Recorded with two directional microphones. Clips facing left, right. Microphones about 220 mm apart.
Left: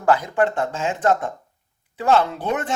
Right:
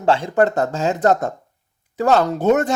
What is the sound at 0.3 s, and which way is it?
Speech, 40° right (ahead or behind).